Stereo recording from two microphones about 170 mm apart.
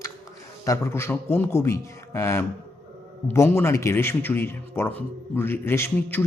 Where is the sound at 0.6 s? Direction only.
15° left (ahead or behind).